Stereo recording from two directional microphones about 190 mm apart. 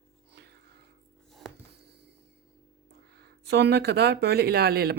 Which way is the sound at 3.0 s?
60° right (ahead or behind).